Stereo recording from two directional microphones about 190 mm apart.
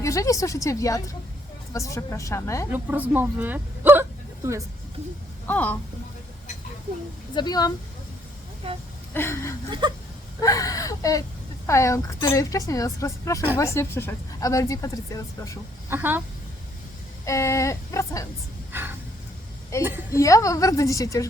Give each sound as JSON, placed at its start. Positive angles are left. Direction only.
{"t": 0.0, "sound": "a woman's voice", "side_deg": 15}
{"t": 2.7, "sound": "a woman's voice", "side_deg": -10}
{"t": 5.5, "sound": "a woman's voice", "side_deg": 10}
{"t": 7.3, "sound": "speech", "side_deg": 20}
{"t": 9.1, "sound": "a woman's voice", "side_deg": 15}
{"t": 9.6, "sound": "whimper", "side_deg": -25}
{"t": 10.4, "sound": "a woman's voice", "side_deg": 20}
{"t": 15.9, "sound": "a woman's voice", "side_deg": -10}
{"t": 17.2, "sound": "a woman's voice", "side_deg": 15}
{"t": 20.1, "sound": "a woman's voice", "side_deg": 15}